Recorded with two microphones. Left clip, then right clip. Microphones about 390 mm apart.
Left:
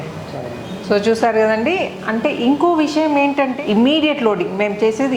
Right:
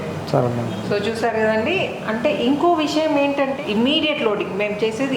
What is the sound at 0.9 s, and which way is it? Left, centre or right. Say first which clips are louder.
A woman's voice: left 7 dB; left.